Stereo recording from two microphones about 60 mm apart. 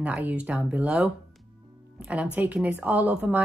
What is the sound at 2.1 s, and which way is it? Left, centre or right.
Speech, right.